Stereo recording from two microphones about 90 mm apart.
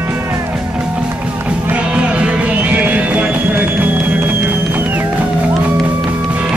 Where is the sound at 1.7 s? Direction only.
15° right (ahead or behind).